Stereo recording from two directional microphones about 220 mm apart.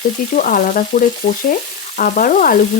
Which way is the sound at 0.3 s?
40° left (ahead or behind).